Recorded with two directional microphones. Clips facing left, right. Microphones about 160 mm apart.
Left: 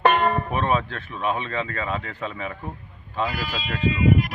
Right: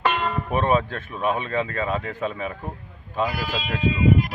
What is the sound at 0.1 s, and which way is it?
Music, 60° left (ahead or behind).